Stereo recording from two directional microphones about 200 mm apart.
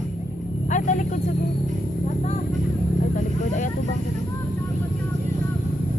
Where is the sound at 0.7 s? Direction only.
35° left (ahead or behind).